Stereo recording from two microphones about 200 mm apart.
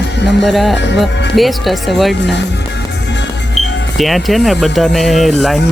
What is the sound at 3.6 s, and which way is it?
Speech, centre (ahead or behind).